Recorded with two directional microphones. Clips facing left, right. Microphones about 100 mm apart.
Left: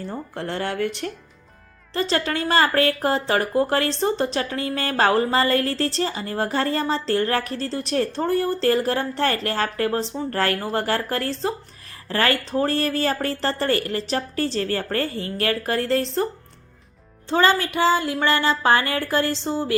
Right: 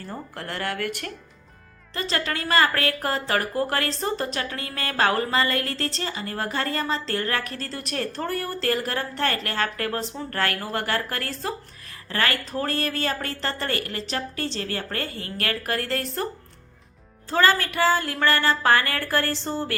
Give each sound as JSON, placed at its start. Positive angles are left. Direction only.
{"t": 0.3, "sound": "a woman's voice", "side_deg": 25}
{"t": 17.2, "sound": "a woman's voice", "side_deg": 25}